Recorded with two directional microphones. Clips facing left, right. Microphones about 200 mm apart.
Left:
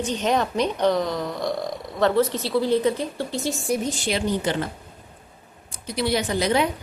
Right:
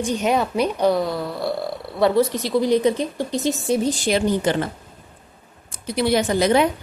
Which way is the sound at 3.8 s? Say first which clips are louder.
Right 5 dB; 40° right (ahead or behind).